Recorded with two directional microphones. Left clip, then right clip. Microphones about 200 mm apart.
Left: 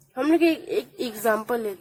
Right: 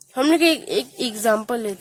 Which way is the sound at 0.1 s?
50° right (ahead or behind).